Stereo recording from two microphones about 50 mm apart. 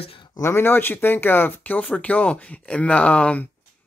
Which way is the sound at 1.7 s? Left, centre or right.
Left.